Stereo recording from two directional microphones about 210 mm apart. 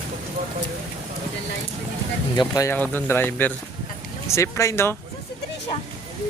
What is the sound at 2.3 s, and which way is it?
Speech, 20° left (ahead or behind).